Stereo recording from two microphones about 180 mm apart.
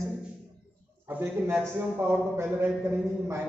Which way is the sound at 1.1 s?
10° right (ahead or behind).